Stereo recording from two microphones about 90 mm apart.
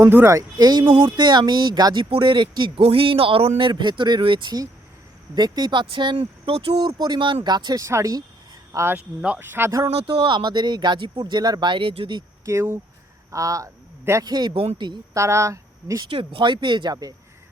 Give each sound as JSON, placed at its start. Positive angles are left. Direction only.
{"t": 0.0, "sound": "speech", "side_deg": -25}
{"t": 0.3, "sound": "speech", "side_deg": -45}
{"t": 0.9, "sound": "speech", "side_deg": -65}
{"t": 2.0, "sound": "speech", "side_deg": -75}
{"t": 7.0, "sound": "speech", "side_deg": -55}
{"t": 7.9, "sound": "speech", "side_deg": -35}
{"t": 9.2, "sound": "speech", "side_deg": -20}
{"t": 10.1, "sound": "speech", "side_deg": -65}
{"t": 12.5, "sound": "a man's voice", "side_deg": -30}
{"t": 14.3, "sound": "speech", "side_deg": -50}
{"t": 14.5, "sound": "speech", "side_deg": -90}
{"t": 15.1, "sound": "speech", "side_deg": -35}
{"t": 16.0, "sound": "speech", "side_deg": -75}